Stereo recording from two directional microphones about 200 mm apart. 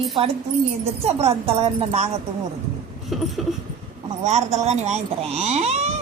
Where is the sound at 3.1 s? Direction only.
Centre (ahead or behind).